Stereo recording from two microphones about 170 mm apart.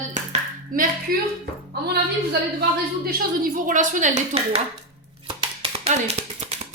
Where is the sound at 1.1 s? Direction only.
60° right (ahead or behind).